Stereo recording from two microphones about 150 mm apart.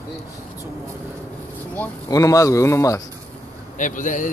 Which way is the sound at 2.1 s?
25° left (ahead or behind).